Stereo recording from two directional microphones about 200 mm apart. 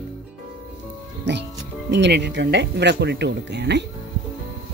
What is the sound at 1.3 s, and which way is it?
Speech, 60° right (ahead or behind).